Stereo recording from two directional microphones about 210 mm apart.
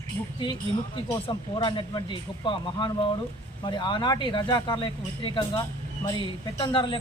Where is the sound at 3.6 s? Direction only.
20° left (ahead or behind).